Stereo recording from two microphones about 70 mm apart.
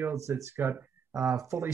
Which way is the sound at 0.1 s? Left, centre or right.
Right.